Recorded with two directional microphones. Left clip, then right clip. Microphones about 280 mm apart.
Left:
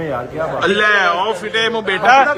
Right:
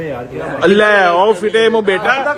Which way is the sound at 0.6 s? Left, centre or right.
Centre.